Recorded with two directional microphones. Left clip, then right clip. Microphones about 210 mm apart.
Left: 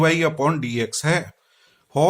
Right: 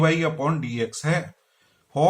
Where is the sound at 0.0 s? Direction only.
50° left (ahead or behind).